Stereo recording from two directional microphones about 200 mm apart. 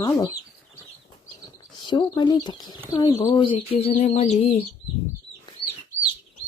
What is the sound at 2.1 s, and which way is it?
Speech, 20° left (ahead or behind).